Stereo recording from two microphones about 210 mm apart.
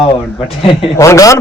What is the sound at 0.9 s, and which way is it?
Speech, 15° left (ahead or behind).